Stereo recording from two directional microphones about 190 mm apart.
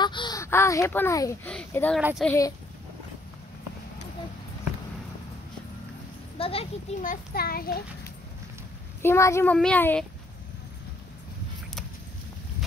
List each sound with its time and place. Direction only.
0.0 s speech: 25° left (ahead or behind)
1.5 s a sound: 5° left (ahead or behind)
2.0 s speech: 5° right (ahead or behind)
2.2 s a child's voice: 15° left (ahead or behind)
6.3 s a child's voice: 30° left (ahead or behind)
7.0 s a child's voice: 50° left (ahead or behind)
9.0 s a child's voice: 15° left (ahead or behind)